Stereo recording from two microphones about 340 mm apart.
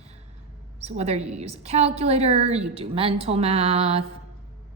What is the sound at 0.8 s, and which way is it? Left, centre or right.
A woman's voice, centre.